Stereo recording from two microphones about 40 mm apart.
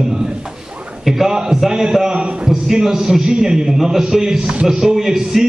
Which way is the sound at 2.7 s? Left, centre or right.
Centre.